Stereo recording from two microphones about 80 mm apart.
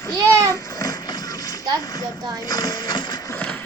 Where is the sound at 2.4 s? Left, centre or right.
Left.